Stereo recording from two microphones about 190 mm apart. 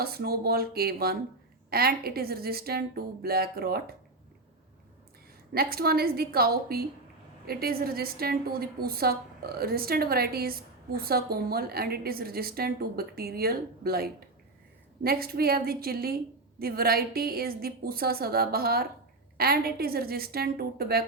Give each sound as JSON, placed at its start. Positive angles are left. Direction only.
{"t": 0.0, "sound": "a woman's voice", "side_deg": -55}
{"t": 5.5, "sound": "a woman's voice", "side_deg": -55}